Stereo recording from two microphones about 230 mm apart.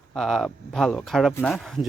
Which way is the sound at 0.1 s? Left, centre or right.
Centre.